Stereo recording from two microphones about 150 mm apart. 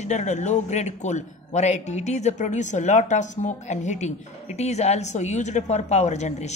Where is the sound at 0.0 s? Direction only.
50° left (ahead or behind).